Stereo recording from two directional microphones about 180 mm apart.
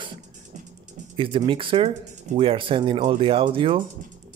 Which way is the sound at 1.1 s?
30° right (ahead or behind).